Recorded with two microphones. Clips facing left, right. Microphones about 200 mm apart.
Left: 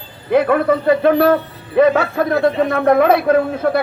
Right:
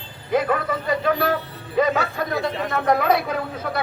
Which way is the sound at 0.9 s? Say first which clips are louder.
Left 8 dB; 60° left (ahead or behind).